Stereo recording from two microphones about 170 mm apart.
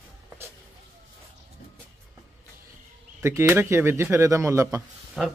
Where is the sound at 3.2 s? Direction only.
15° right (ahead or behind).